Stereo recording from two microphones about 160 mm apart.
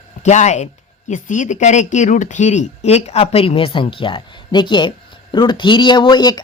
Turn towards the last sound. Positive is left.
turn(degrees=25)  # may be behind; listen again after turning